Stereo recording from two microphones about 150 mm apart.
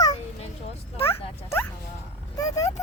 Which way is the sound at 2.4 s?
25° left (ahead or behind).